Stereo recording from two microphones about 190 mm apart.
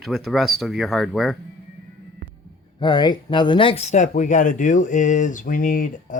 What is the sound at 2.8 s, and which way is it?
Speech, 20° left (ahead or behind).